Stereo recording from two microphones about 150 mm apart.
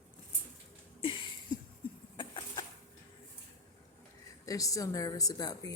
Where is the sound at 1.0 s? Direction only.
35° left (ahead or behind).